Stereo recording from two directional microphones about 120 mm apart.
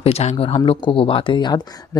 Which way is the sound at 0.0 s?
65° left (ahead or behind).